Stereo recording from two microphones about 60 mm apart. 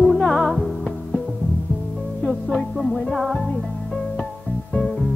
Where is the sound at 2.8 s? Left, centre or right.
Centre.